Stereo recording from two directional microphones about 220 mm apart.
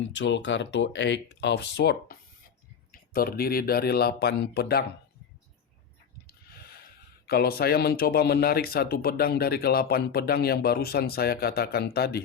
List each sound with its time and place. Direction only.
0.1 s speech: 55° left (ahead or behind)
6.2 s a sound: 45° left (ahead or behind)
7.3 s speech: 45° left (ahead or behind)